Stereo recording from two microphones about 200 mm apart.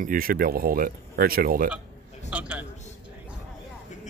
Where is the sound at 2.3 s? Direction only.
5° right (ahead or behind).